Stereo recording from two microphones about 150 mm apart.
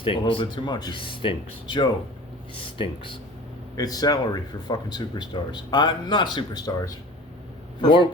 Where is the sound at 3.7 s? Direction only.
25° left (ahead or behind).